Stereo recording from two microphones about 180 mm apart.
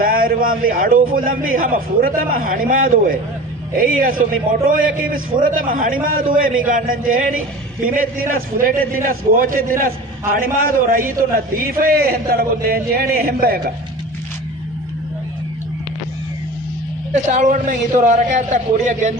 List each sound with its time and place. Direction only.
0.0 s a man's voice: 50° right (ahead or behind)
17.2 s a man's voice: 45° right (ahead or behind)